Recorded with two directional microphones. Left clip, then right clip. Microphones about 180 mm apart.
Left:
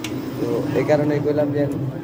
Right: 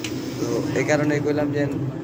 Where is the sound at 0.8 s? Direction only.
15° left (ahead or behind).